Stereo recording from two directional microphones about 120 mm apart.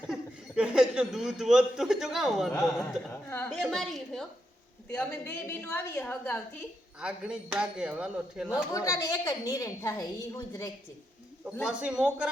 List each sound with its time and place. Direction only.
0.1 s speech: 10° right (ahead or behind)
3.1 s a woman's voice: 20° left (ahead or behind)
3.5 s a woman's voice: 5° left (ahead or behind)
5.2 s a woman's voice: 20° left (ahead or behind)
7.0 s speech: 5° right (ahead or behind)
8.7 s a woman's voice: 25° left (ahead or behind)
11.6 s speech: 5° right (ahead or behind)